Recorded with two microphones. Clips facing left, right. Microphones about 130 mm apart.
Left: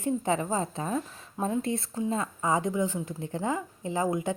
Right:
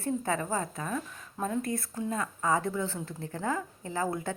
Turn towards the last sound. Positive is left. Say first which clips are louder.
# left 4 dB
turn(degrees=15)  # may be behind; listen again after turning